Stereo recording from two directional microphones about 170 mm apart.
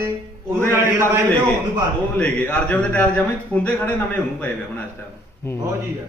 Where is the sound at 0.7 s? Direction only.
15° right (ahead or behind).